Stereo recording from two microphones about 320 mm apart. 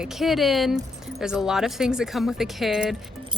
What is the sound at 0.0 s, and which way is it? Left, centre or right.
A woman's voice, centre.